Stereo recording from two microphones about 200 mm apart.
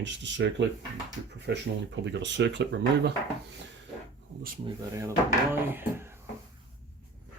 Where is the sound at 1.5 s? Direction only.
60° right (ahead or behind).